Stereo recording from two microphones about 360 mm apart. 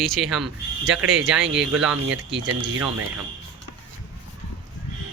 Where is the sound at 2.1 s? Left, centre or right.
Right.